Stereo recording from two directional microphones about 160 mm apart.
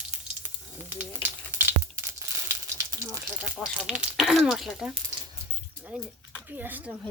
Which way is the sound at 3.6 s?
Centre (ahead or behind).